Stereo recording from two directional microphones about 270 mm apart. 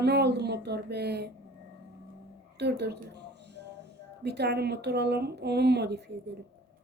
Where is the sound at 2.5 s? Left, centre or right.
Right.